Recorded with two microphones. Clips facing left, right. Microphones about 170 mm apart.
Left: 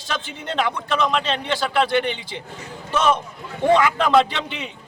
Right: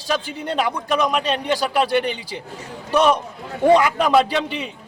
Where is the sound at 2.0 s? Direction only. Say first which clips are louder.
Right 1 dB; 40° right (ahead or behind).